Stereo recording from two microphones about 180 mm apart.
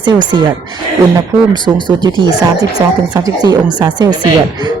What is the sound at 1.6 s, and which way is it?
Speech, 25° right (ahead or behind).